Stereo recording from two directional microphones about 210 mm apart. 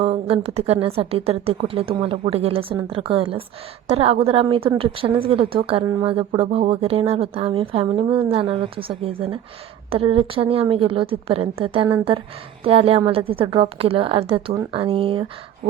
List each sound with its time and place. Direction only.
0.0 s speech: 25° right (ahead or behind)